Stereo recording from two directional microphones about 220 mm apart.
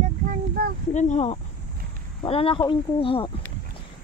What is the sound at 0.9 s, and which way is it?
Speech, 35° left (ahead or behind).